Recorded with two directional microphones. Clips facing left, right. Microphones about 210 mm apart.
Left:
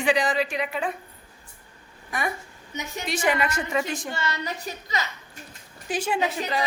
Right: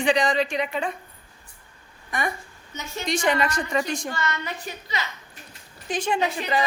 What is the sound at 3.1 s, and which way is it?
A woman's voice, 5° left (ahead or behind).